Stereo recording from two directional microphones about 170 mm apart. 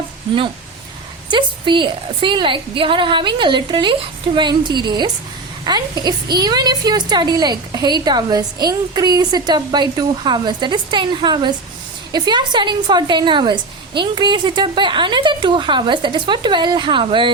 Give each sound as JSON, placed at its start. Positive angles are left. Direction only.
{"t": 1.3, "sound": "a woman's voice", "side_deg": -30}